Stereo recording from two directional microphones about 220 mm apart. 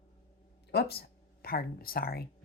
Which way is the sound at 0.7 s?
45° left (ahead or behind).